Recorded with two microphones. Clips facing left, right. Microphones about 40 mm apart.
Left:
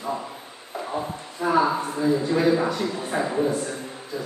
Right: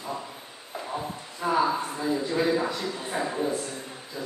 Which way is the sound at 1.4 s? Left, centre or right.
Centre.